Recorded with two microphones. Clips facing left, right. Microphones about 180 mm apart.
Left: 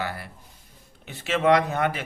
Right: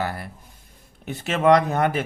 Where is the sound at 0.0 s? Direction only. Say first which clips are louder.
Right 4 dB; 45° right (ahead or behind).